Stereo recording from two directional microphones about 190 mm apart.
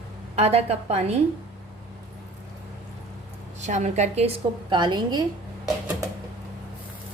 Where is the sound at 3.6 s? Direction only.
35° right (ahead or behind).